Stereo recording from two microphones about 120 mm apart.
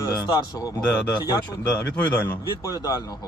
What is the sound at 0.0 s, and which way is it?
Speech, 35° left (ahead or behind).